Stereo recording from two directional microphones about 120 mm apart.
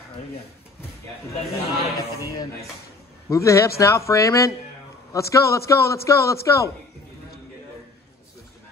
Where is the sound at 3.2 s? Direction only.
25° left (ahead or behind).